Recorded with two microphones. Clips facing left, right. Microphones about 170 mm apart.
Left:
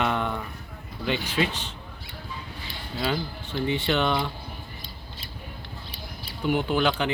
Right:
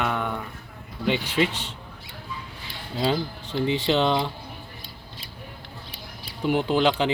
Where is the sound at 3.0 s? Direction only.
30° right (ahead or behind).